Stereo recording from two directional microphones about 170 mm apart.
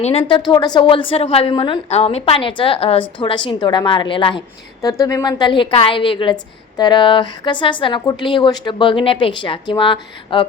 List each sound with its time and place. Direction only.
0.0 s a woman's voice: 35° left (ahead or behind)